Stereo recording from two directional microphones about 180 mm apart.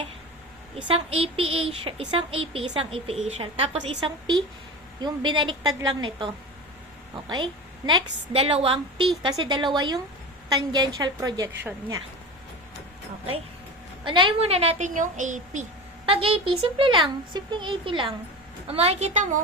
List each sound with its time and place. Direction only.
0.8 s a woman's voice: 30° right (ahead or behind)
14.0 s a woman's voice: 25° right (ahead or behind); by 15.6 s 45° right (ahead or behind)
16.0 s a woman's voice: 30° right (ahead or behind)